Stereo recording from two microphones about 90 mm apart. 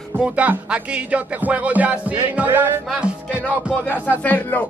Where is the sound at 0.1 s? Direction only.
15° right (ahead or behind).